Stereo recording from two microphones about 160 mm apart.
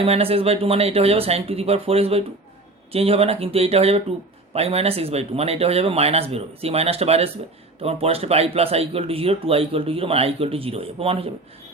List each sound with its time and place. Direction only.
0.0 s speech: 35° right (ahead or behind)